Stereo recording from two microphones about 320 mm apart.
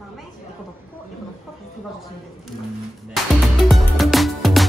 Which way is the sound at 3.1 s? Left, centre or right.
Centre.